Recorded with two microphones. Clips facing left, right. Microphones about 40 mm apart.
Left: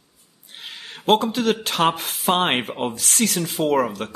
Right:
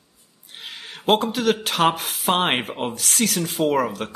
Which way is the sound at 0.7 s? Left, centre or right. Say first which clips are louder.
Left 1 dB; centre.